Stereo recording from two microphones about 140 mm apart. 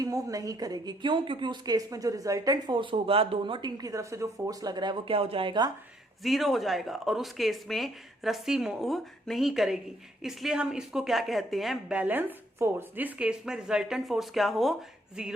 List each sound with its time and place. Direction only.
0.0 s a woman's voice: 25° right (ahead or behind)
6.2 s speech: centre (ahead or behind)